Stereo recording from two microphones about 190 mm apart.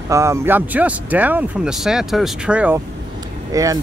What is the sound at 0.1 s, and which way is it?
Speech, 15° right (ahead or behind).